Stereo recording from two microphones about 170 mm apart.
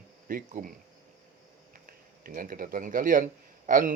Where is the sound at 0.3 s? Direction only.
55° right (ahead or behind).